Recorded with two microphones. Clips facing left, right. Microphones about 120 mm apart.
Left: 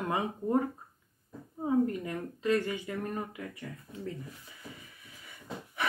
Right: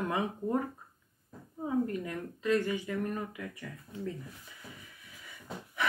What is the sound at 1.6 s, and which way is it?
Speech, 25° left (ahead or behind).